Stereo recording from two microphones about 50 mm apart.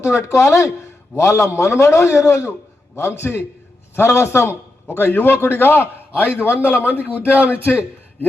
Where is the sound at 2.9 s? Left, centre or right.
Left.